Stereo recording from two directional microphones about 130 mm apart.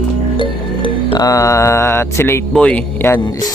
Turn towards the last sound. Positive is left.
turn(degrees=15)  # may be behind; listen again after turning